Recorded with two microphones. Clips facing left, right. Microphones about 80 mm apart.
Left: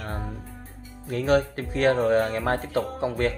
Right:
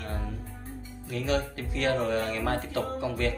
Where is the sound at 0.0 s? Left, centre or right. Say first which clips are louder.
Left 3 dB; left.